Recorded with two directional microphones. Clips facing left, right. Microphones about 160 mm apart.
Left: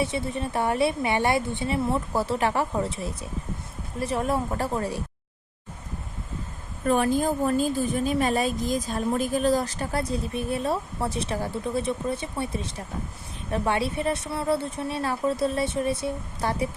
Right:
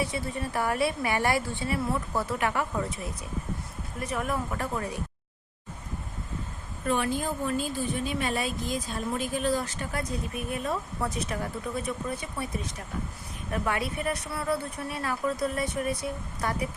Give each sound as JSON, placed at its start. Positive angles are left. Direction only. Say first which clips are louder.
{"t": 0.0, "sound": "a woman's voice", "louder": "left 4 dB", "side_deg": 25}
{"t": 6.8, "sound": "a woman's voice", "louder": "left 6 dB", "side_deg": 45}